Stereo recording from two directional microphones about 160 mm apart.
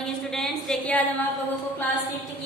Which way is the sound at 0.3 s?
5° left (ahead or behind).